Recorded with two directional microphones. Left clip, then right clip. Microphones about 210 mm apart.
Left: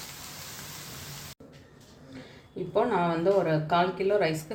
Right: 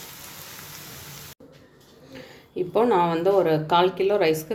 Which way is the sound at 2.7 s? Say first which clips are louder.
Right 5 dB; 40° right (ahead or behind).